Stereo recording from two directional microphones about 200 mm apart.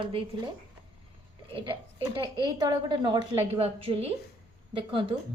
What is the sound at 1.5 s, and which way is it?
A woman's voice, 25° right (ahead or behind).